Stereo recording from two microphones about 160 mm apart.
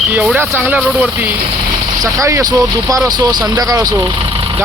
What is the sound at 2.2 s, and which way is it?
Speech, 20° right (ahead or behind).